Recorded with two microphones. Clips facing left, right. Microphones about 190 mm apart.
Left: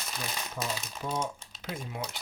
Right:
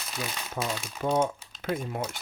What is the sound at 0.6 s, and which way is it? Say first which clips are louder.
Speech: right 6 dB; 50° right (ahead or behind).